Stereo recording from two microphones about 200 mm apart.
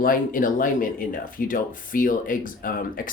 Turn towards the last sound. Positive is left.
turn(degrees=45)  # may be behind; listen again after turning